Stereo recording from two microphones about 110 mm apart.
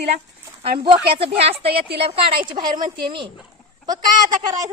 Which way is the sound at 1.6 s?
65° right (ahead or behind).